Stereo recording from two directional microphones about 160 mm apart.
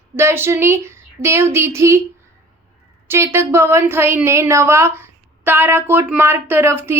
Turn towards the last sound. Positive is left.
turn(degrees=-15)  # may be behind; listen again after turning